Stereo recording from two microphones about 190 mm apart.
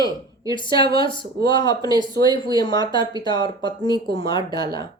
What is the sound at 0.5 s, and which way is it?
Speech, 25° left (ahead or behind).